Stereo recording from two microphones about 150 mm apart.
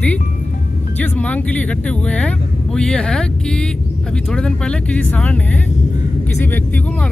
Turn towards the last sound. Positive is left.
turn(degrees=10)  # may be behind; listen again after turning